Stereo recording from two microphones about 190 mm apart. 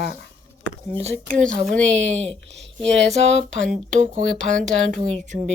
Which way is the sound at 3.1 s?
35° right (ahead or behind).